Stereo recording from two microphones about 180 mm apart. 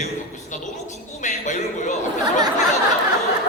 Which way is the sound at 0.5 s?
40° left (ahead or behind).